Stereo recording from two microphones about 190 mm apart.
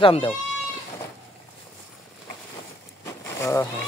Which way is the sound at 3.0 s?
15° left (ahead or behind).